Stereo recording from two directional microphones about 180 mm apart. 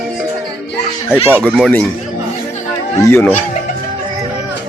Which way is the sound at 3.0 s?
10° left (ahead or behind).